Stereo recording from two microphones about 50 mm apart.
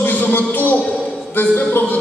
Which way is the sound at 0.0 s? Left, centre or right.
Left.